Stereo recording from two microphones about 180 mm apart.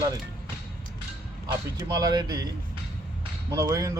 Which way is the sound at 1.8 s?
20° right (ahead or behind).